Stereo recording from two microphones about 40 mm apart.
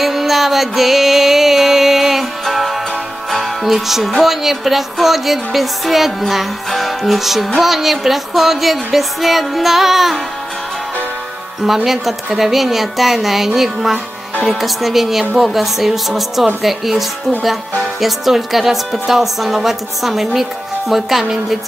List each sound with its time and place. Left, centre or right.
0.0 s music: centre
11.6 s music: centre